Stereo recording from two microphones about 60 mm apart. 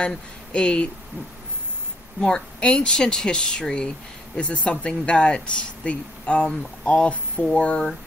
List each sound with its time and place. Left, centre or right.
0.0 s speech: centre
2.1 s speech: centre